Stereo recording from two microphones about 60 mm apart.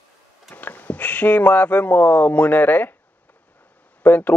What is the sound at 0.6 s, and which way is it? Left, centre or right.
Speech, left.